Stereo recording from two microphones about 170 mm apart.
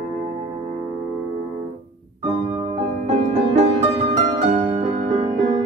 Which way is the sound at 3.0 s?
40° right (ahead or behind).